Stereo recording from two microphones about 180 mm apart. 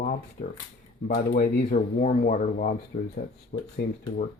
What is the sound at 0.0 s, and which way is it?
Speech, 45° left (ahead or behind).